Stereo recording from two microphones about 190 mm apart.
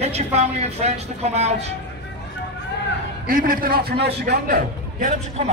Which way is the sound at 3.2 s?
50° right (ahead or behind).